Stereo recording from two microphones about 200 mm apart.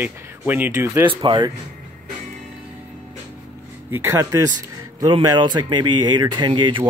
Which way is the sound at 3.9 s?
10° right (ahead or behind).